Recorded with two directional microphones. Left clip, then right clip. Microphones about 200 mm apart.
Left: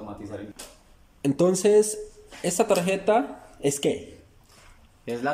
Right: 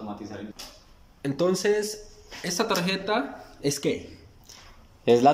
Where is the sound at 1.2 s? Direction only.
15° left (ahead or behind).